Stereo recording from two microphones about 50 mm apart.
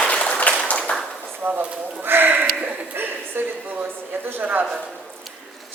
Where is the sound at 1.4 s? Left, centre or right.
Right.